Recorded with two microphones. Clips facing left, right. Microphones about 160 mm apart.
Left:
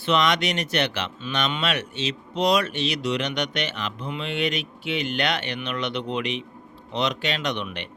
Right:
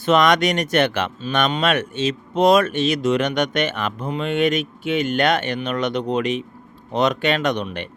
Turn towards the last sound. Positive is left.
turn(degrees=-45)  # may be behind; listen again after turning